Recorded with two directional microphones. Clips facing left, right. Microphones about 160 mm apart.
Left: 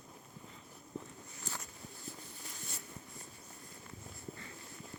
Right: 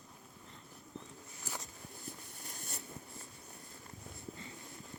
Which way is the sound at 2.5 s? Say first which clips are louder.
Right 2 dB; 50° right (ahead or behind).